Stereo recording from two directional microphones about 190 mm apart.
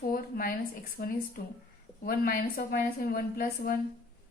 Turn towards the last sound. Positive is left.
turn(degrees=50)  # may be behind; listen again after turning